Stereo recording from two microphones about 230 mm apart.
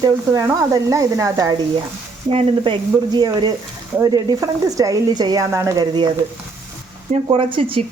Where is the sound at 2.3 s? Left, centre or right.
Right.